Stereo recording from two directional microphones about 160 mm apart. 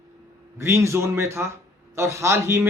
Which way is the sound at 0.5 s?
15° right (ahead or behind).